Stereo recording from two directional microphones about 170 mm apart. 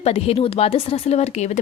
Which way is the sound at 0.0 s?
35° left (ahead or behind).